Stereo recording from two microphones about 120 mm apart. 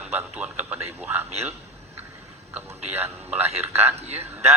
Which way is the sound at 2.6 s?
20° right (ahead or behind).